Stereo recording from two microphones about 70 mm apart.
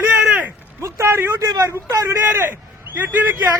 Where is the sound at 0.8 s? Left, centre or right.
Right.